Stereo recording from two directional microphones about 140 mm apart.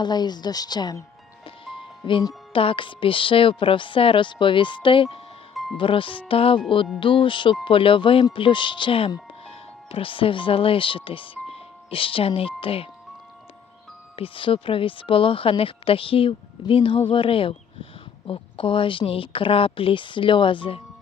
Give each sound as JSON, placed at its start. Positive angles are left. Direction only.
{"t": 0.0, "sound": "a woman's voice", "side_deg": 30}
{"t": 14.2, "sound": "speech", "side_deg": 40}